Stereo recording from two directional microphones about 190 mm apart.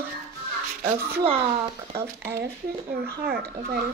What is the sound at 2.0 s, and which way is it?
Speech, 15° right (ahead or behind).